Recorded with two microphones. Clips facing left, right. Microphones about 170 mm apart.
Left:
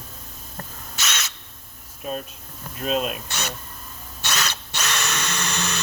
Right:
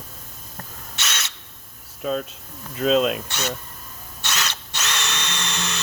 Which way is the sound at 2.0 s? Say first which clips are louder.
Right 5 dB; 90° right.